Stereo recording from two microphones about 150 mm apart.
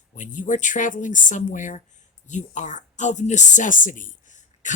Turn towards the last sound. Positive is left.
turn(degrees=55)  # may be behind; listen again after turning